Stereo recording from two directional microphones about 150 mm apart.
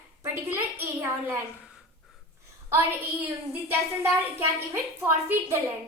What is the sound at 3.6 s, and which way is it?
A woman's voice, 15° right (ahead or behind).